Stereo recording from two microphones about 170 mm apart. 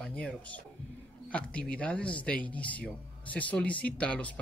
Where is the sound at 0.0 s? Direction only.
5° left (ahead or behind).